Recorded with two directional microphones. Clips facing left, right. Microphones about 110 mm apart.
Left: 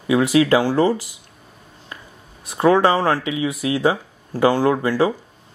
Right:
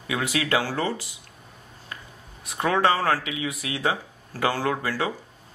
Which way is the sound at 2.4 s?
30° left (ahead or behind).